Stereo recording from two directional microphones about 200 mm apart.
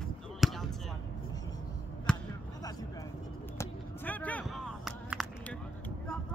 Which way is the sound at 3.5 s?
10° left (ahead or behind).